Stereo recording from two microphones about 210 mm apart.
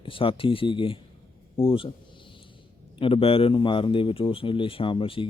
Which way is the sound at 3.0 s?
25° left (ahead or behind).